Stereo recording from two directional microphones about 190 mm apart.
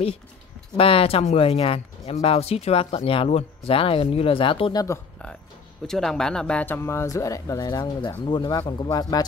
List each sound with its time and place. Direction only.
0.7 s speech: 30° left (ahead or behind)
4.8 s a sound: 15° left (ahead or behind)
5.9 s speech: centre (ahead or behind); by 9.2 s 20° left (ahead or behind)